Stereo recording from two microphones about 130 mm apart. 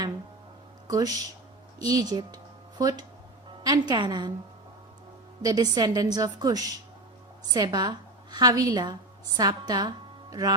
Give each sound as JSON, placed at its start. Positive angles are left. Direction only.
{"t": 0.9, "sound": "a woman's voice", "side_deg": -30}
{"t": 5.4, "sound": "a woman's voice", "side_deg": -30}